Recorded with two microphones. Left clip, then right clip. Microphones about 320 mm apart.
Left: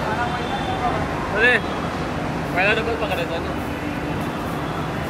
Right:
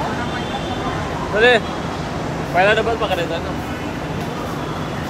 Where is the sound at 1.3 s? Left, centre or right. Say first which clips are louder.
Right 4 dB; centre.